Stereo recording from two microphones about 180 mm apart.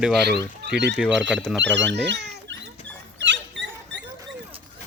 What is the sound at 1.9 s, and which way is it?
Dog, 70° right (ahead or behind).